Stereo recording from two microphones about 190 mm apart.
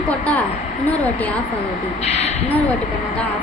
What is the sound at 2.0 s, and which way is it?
Speech, 35° left (ahead or behind).